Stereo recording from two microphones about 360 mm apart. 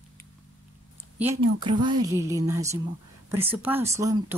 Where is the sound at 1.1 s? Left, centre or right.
Centre.